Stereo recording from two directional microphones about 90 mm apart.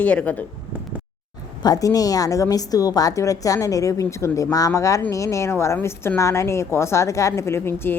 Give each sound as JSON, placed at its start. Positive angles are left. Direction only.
{"t": 0.0, "sound": "speech", "side_deg": 15}
{"t": 1.6, "sound": "a woman's voice", "side_deg": 45}